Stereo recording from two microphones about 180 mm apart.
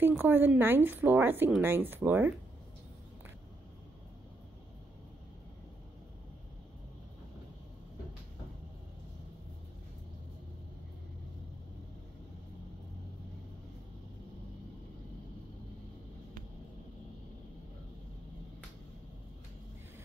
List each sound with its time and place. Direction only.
0.0 s speech: 10° right (ahead or behind)